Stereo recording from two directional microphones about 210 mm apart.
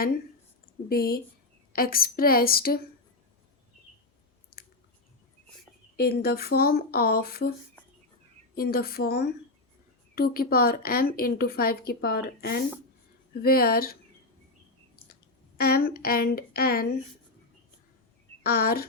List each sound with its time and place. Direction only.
0.9 s a woman's voice: 45° left (ahead or behind)
6.0 s a woman's voice: 45° left (ahead or behind)
8.5 s a woman's voice: 45° left (ahead or behind)
15.1 s speech: 45° left (ahead or behind)
18.4 s a woman's voice: 45° left (ahead or behind)